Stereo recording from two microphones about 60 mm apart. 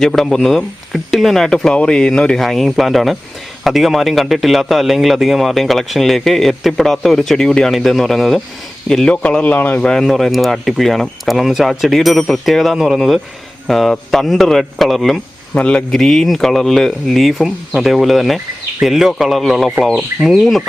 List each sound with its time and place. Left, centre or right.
0.0 s speech: centre
2.4 s a man's voice: centre
7.7 s a man's voice: centre
9.2 s speech: left
9.8 s a man's voice: centre
15.5 s speech: left
15.9 s a man's voice: centre